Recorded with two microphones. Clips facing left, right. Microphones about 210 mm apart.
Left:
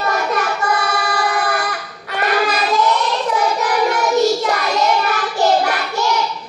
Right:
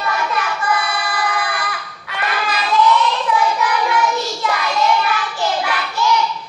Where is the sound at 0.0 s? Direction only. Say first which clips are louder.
Left 2 dB; 45° left (ahead or behind).